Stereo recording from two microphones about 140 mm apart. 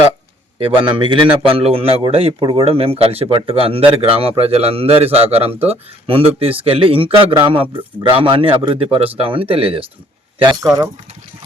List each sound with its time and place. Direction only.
0.6 s a man's voice: 35° right (ahead or behind)